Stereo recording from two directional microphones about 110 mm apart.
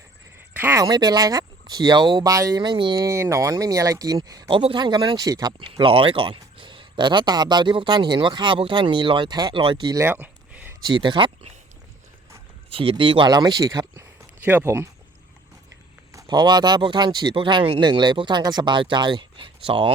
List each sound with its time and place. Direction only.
0.5 s speech: 20° right (ahead or behind)
0.8 s speech: 40° right (ahead or behind)
3.0 s speech: 25° right (ahead or behind)
4.4 s speech: 50° right (ahead or behind)
9.9 s a sound: 20° right (ahead or behind)
10.8 s speech: 45° right (ahead or behind)
12.7 s speech: 55° right (ahead or behind); by 14.8 s 20° right (ahead or behind)
16.2 s speech: 40° right (ahead or behind)